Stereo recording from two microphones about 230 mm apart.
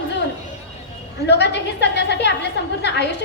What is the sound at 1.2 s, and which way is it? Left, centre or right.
A woman's voice, left.